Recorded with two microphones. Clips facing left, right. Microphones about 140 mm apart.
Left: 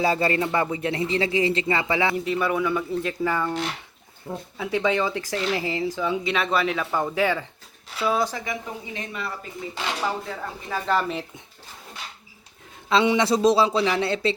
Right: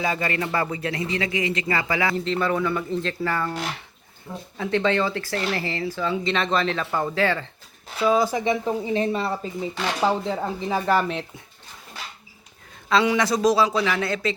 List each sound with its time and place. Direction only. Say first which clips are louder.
0.0 s a man's voice: left 3 dB; 30° left (ahead or behind)
2.1 s speech: even; 10° left (ahead or behind)
4.5 s speech: right 2 dB; 10° left (ahead or behind)
8.3 s speech: right 9 dB; 20° right (ahead or behind)
8.6 s speech: right 11 dB; 35° right (ahead or behind)
10.8 s speech: right 1 dB; 5° right (ahead or behind)
12.9 s a man's voice: left 1 dB; 25° left (ahead or behind)